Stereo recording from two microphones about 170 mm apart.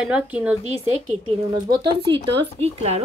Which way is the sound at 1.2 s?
25° right (ahead or behind).